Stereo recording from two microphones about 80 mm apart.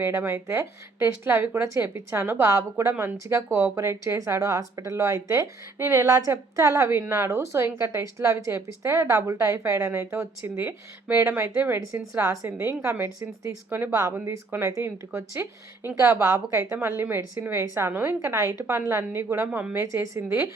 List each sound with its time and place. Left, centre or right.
0.0 s a woman's voice: right